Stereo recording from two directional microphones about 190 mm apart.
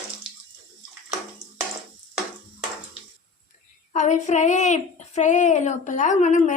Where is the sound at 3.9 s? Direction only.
40° left (ahead or behind).